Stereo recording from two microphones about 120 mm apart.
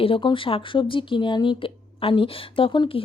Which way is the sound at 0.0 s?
45° left (ahead or behind).